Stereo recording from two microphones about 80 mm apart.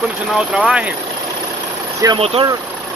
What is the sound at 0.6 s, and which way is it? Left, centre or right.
Speech, centre.